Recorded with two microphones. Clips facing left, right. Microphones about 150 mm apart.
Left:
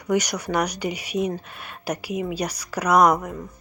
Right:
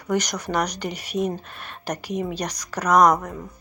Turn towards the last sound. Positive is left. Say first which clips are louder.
# even
turn(degrees=10)  # may be behind; listen again after turning